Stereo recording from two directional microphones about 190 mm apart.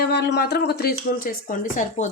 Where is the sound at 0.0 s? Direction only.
60° left (ahead or behind).